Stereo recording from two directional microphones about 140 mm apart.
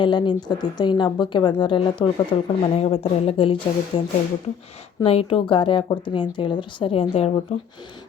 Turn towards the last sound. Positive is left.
turn(degrees=40)  # may be behind; listen again after turning